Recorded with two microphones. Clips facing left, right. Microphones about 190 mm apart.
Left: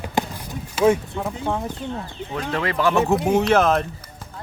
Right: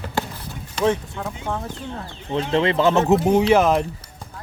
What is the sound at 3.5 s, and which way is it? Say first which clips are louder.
Speech: even; 10° right (ahead or behind).